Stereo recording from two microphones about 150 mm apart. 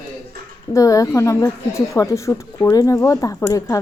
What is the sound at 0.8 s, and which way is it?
Speech, 20° left (ahead or behind).